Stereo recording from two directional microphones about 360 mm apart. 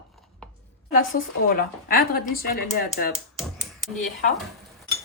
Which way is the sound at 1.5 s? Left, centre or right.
Left.